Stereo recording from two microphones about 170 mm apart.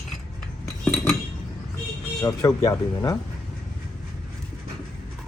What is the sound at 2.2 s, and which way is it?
Speech, 15° left (ahead or behind).